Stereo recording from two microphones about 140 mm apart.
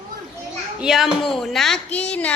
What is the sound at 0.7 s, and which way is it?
A woman's voice, 5° right (ahead or behind).